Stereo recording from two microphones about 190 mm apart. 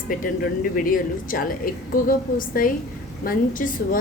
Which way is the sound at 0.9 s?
50° left (ahead or behind).